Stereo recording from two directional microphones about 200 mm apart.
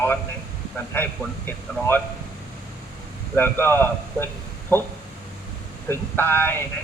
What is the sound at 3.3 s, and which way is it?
Speech, 10° left (ahead or behind).